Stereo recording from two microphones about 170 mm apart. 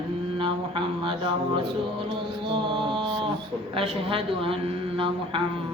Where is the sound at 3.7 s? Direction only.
35° right (ahead or behind).